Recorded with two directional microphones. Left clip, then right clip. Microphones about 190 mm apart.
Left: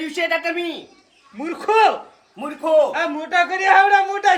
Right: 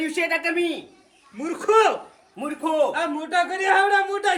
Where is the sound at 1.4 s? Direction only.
50° left (ahead or behind).